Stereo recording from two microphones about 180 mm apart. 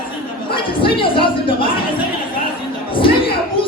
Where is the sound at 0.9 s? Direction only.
30° left (ahead or behind).